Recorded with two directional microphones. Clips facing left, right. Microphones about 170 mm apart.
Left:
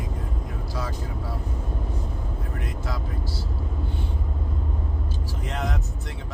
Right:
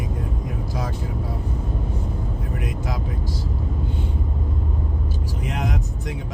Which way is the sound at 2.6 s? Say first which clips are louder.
Right 3 dB; 15° right (ahead or behind).